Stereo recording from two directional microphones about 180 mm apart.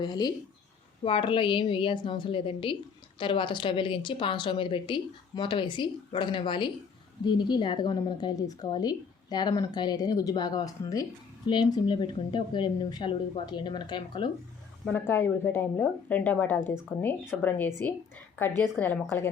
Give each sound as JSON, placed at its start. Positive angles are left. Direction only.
{"t": 0.0, "sound": "a woman's voice", "side_deg": 25}
{"t": 14.8, "sound": "a woman's voice", "side_deg": 10}